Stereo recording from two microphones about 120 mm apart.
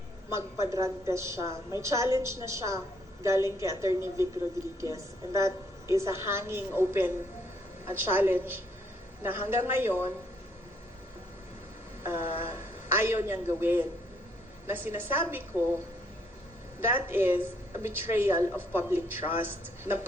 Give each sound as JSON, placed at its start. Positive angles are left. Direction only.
{"t": 0.3, "sound": "a woman's voice", "side_deg": -25}
{"t": 12.0, "sound": "a man's voice", "side_deg": -20}
{"t": 16.8, "sound": "a woman's voice", "side_deg": -20}